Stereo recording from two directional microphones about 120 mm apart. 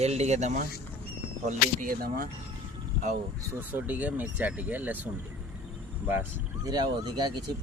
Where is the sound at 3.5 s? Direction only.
15° right (ahead or behind).